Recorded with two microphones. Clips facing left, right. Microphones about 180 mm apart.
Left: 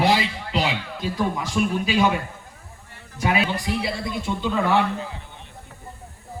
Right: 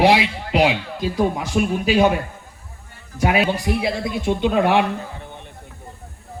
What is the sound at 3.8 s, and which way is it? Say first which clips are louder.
Speech: right 5 dB; 75° right (ahead or behind).